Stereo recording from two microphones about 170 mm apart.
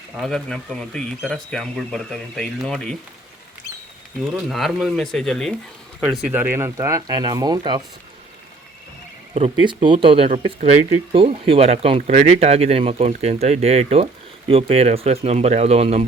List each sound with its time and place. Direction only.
0.2 s speech: 5° left (ahead or behind)
4.4 s speech: centre (ahead or behind); by 7.8 s 25° right (ahead or behind)
9.3 s speech: 35° right (ahead or behind)